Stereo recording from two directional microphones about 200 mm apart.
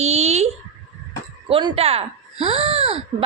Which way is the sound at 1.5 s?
25° right (ahead or behind).